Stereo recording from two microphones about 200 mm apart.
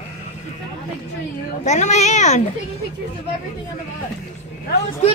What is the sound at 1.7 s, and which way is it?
Speech, 35° left (ahead or behind).